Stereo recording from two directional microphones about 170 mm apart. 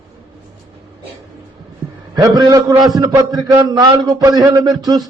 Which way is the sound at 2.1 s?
20° right (ahead or behind).